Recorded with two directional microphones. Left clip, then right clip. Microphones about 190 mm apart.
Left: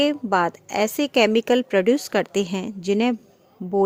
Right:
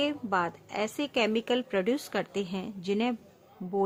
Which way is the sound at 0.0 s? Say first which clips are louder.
Left 9 dB; 40° left (ahead or behind).